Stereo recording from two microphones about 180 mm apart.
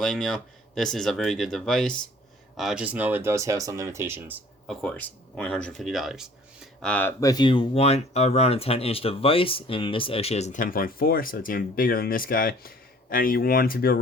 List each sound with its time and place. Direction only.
0.0 s speech: centre (ahead or behind)
4.7 s speech: 5° left (ahead or behind); by 14.0 s 55° left (ahead or behind)